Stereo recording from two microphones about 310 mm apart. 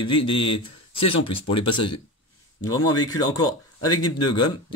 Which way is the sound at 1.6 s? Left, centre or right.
Left.